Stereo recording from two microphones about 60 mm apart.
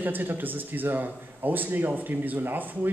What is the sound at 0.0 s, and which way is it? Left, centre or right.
A man's voice, right.